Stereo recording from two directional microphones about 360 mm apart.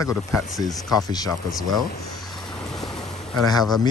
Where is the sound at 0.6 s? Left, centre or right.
Centre.